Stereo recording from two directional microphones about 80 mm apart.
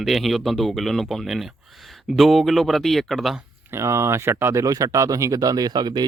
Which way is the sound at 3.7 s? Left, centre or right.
Right.